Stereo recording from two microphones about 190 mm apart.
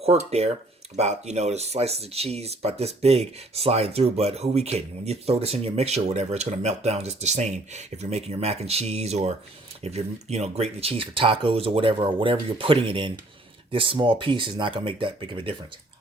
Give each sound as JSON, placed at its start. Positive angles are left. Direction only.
{"t": 0.0, "sound": "speech", "side_deg": -35}